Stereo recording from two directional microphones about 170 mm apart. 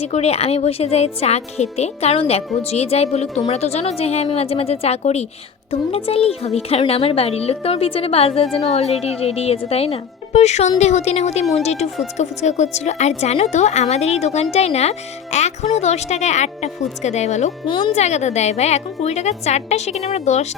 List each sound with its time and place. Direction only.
0.0 s speech: 35° left (ahead or behind)
17.7 s speech: 30° left (ahead or behind)
17.9 s speech: 40° left (ahead or behind)